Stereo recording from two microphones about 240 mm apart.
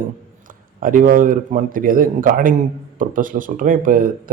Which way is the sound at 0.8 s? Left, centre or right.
Right.